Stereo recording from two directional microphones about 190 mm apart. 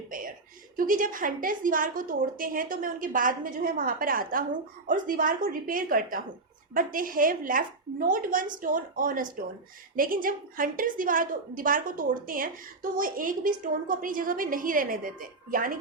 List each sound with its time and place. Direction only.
0.8 s a woman's voice: 45° right (ahead or behind)